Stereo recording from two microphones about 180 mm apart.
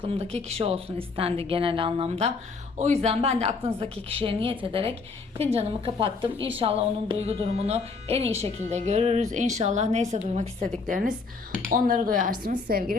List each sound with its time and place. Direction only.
0.0 s speech: 35° right (ahead or behind); by 13.0 s 55° right (ahead or behind)